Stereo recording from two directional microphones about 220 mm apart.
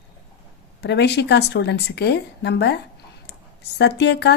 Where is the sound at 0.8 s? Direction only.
50° left (ahead or behind).